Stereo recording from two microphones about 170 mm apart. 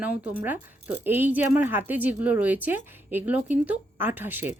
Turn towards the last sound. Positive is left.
turn(degrees=-10)  # may be behind; listen again after turning